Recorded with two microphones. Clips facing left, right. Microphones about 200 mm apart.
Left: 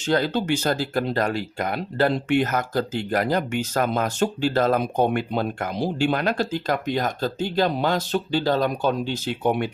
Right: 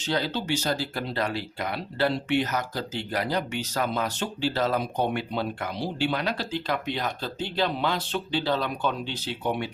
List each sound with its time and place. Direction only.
0.0 s speech: 50° left (ahead or behind)